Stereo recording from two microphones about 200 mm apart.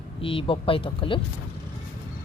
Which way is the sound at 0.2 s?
25° left (ahead or behind).